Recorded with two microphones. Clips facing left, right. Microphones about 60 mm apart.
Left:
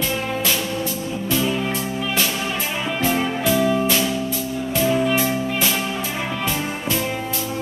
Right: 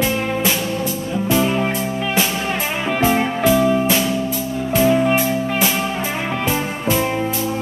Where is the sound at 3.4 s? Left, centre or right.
Centre.